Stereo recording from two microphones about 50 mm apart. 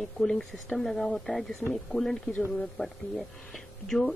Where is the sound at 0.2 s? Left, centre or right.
Centre.